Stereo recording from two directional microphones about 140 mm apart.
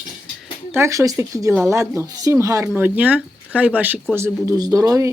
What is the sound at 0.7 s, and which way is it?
Speech, 20° right (ahead or behind).